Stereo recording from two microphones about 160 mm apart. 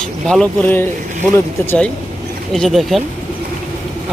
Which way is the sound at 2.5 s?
Centre (ahead or behind).